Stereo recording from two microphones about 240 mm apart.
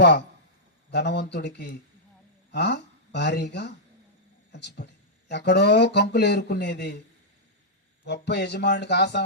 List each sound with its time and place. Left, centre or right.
0.9 s speech: left
8.0 s speech: left